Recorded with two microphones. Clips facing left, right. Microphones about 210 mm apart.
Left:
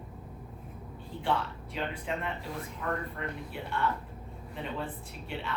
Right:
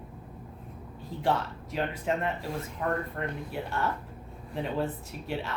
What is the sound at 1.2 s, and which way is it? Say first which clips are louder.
Speech: right 3 dB; 40° right (ahead or behind).